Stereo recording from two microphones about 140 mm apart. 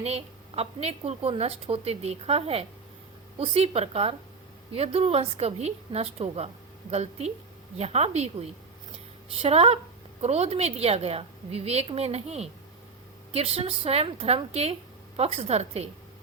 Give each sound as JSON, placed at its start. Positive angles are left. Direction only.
{"t": 0.0, "sound": "a woman's voice", "side_deg": -45}